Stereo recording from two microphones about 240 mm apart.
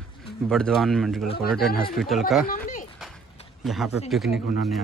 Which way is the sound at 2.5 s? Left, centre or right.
Left.